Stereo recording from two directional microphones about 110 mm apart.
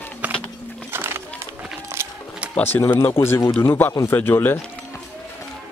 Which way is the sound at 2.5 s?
15° left (ahead or behind).